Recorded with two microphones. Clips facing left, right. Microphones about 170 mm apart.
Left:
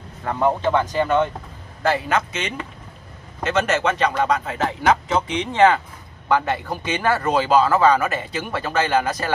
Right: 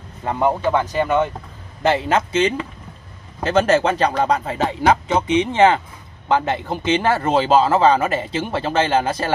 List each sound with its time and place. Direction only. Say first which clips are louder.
0.2 s speech: right 1 dB; 15° right (ahead or behind)
1.8 s speech: right 3 dB; 25° right (ahead or behind)